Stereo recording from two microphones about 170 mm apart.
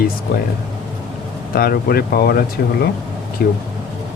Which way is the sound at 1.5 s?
60° left (ahead or behind).